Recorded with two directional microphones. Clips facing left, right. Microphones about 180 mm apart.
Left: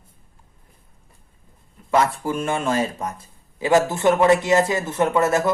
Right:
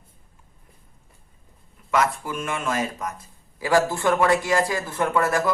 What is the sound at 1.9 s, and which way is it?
Speech, 30° left (ahead or behind).